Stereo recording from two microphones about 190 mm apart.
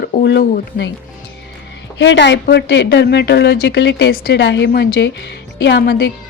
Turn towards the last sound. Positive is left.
turn(degrees=60)  # may be behind; listen again after turning